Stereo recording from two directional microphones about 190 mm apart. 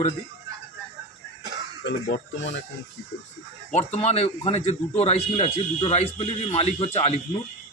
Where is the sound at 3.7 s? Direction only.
35° left (ahead or behind).